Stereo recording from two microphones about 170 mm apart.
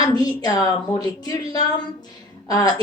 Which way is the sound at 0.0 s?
25° left (ahead or behind).